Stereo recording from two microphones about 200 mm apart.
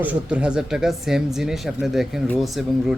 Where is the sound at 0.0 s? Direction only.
5° right (ahead or behind).